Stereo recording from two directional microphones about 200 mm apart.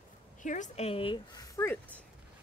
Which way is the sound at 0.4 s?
40° left (ahead or behind).